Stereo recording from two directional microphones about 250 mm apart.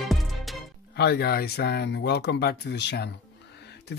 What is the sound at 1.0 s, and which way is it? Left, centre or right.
Speech, left.